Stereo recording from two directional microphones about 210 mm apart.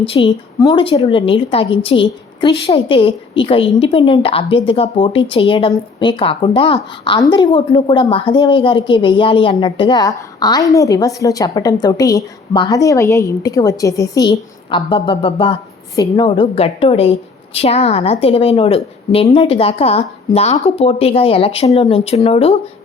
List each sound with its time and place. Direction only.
0.0 s a woman's voice: 25° left (ahead or behind)